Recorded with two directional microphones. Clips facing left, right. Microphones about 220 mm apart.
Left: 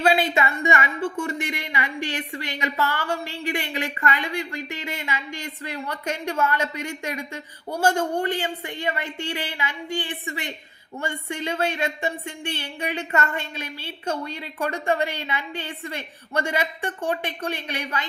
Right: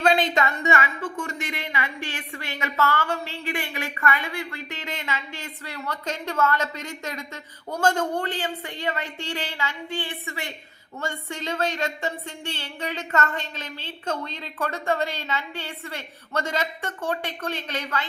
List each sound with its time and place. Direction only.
0.0 s a woman's voice: 10° left (ahead or behind)